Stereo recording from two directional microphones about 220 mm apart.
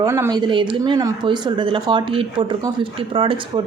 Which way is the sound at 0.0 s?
15° right (ahead or behind).